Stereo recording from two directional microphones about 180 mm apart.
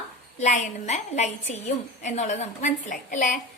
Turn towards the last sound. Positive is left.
turn(degrees=45)  # may be behind; listen again after turning